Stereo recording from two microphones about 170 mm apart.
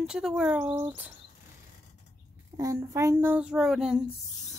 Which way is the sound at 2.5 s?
20° right (ahead or behind).